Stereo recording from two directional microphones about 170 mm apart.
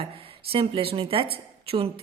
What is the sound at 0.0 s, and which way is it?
Speech, 35° right (ahead or behind).